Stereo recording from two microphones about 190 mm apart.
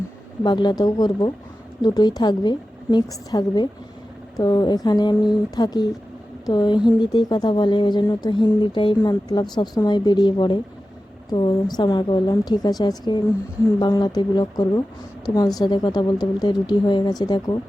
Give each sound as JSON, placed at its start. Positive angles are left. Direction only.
{"t": 0.4, "sound": "speech", "side_deg": 25}